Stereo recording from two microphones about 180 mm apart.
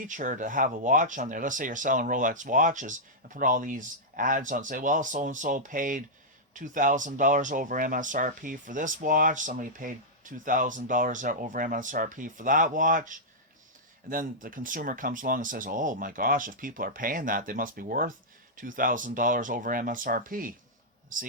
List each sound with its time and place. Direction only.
0.0 s speech: 45° right (ahead or behind)